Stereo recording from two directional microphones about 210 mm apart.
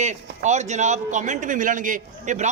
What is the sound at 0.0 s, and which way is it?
A man's voice, 35° right (ahead or behind).